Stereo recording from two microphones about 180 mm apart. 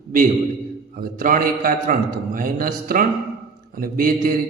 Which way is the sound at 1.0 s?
50° right (ahead or behind).